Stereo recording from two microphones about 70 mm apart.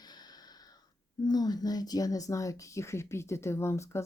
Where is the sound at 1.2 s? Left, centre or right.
Left.